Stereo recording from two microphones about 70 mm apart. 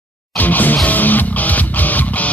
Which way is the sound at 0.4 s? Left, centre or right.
Left.